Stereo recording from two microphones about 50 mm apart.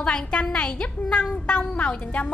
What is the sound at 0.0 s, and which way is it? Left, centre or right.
A woman's voice, centre.